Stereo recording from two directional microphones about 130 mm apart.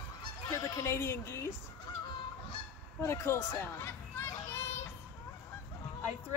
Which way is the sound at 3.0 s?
20° left (ahead or behind).